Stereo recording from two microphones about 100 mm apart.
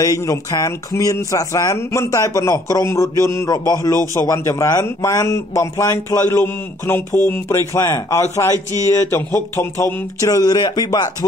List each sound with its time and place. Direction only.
0.0 s a man's voice: 35° left (ahead or behind)